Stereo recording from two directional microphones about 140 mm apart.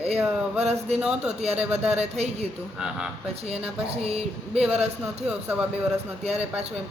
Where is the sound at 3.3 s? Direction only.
45° right (ahead or behind).